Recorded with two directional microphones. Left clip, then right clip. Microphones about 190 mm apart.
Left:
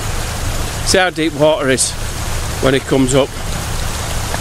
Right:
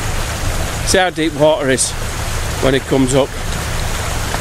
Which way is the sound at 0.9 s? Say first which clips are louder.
Left 1 dB; 15° left (ahead or behind).